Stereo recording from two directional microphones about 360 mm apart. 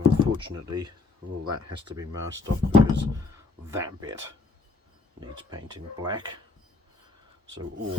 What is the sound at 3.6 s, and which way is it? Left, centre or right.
Speech, centre.